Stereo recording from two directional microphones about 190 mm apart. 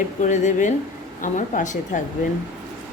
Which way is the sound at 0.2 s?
40° left (ahead or behind).